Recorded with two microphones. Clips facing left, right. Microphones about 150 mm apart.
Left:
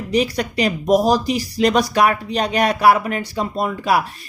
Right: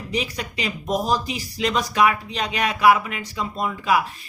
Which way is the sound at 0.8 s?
75° left (ahead or behind).